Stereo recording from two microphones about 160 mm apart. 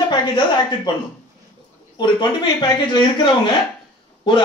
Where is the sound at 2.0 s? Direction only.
30° left (ahead or behind).